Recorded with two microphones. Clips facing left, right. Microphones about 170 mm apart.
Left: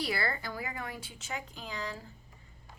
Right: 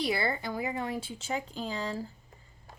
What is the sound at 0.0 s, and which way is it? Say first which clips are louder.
Speech: right 4 dB; 20° right (ahead or behind).